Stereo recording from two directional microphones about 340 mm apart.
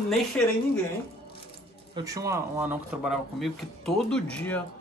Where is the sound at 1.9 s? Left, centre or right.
Centre.